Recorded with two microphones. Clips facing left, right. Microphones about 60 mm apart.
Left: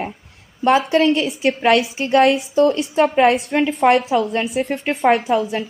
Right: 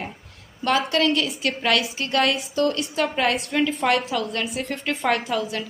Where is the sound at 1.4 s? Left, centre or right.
Left.